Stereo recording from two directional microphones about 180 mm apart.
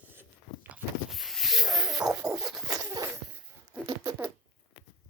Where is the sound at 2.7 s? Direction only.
20° right (ahead or behind).